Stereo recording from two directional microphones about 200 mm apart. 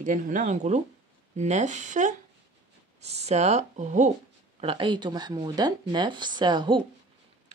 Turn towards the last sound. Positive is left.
turn(degrees=-20)  # may be behind; listen again after turning